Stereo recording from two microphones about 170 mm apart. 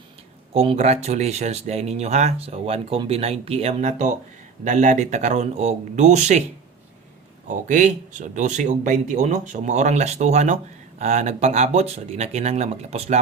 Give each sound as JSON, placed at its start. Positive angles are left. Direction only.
{"t": 0.5, "sound": "speech", "side_deg": -35}
{"t": 7.4, "sound": "speech", "side_deg": -50}